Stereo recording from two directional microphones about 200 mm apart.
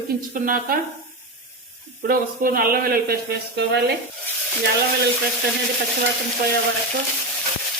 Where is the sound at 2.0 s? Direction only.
45° right (ahead or behind).